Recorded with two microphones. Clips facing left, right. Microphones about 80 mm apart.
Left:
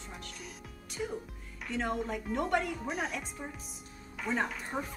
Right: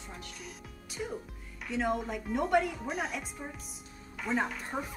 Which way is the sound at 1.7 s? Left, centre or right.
Centre.